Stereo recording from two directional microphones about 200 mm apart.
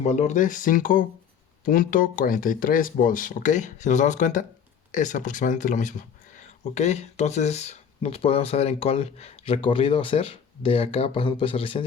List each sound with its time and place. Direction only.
0.0 s speech: 35° left (ahead or behind)